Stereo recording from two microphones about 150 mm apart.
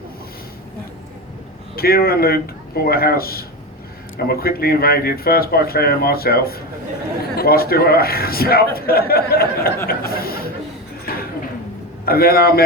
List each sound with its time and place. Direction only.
1.7 s speech: 90° left
12.0 s speech: 90° left